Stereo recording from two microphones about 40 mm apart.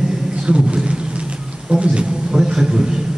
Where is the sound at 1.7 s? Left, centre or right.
Right.